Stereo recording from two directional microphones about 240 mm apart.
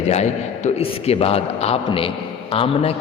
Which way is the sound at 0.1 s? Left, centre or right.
Left.